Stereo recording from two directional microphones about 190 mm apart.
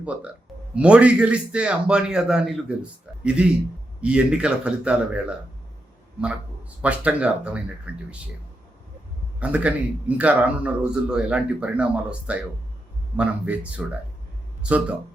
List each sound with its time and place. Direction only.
0.0 s a man's voice: 5° right (ahead or behind)
6.8 s a man's voice: 5° right (ahead or behind)
9.4 s a man's voice: 5° right (ahead or behind)